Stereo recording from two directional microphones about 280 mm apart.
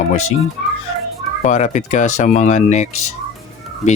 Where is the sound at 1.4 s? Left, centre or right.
Left.